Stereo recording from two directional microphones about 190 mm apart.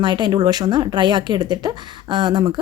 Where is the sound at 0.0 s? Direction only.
20° right (ahead or behind).